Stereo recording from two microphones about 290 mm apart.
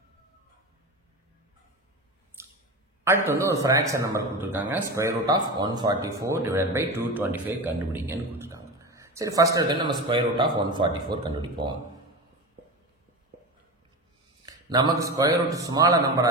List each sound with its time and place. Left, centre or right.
2.4 s squish: centre
3.0 s a man's voice: centre
14.4 s speech: centre